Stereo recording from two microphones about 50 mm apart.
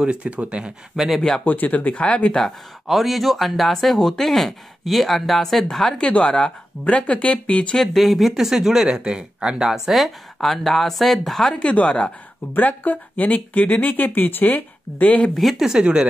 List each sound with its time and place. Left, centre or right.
0.0 s speech: centre
1.4 s speech: left
2.9 s speech: centre; by 7.6 s left
7.7 s speech: centre
11.6 s speech: left
15.3 s speech: centre
15.6 s speech: centre